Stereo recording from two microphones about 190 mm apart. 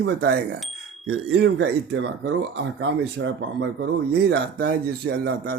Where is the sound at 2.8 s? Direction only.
75° right (ahead or behind).